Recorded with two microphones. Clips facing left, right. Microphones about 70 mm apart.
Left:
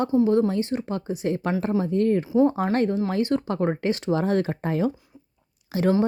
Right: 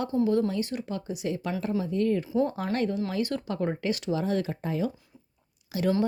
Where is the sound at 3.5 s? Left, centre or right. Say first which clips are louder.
Left 5 dB; left.